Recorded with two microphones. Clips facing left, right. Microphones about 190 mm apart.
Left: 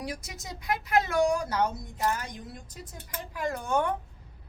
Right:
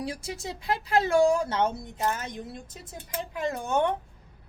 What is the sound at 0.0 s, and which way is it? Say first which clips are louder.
Speech: right 4 dB; 30° right (ahead or behind).